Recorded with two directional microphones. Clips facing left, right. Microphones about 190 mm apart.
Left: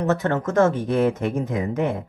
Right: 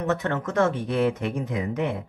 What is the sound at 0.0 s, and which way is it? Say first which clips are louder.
Speech: left 4 dB; 40° left (ahead or behind).